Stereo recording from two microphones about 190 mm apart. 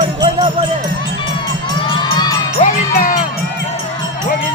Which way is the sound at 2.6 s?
45° left (ahead or behind).